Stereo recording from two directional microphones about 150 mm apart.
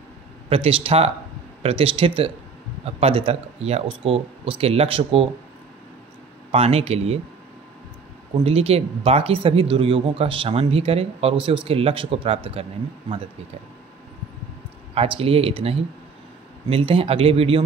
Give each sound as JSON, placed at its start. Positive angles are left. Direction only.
{"t": 0.5, "sound": "speech", "side_deg": -40}
{"t": 6.5, "sound": "speech", "side_deg": -45}
{"t": 8.5, "sound": "speech", "side_deg": -40}
{"t": 15.0, "sound": "speech", "side_deg": -40}